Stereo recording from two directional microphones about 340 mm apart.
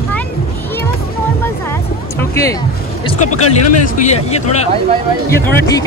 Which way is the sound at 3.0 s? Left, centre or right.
Left.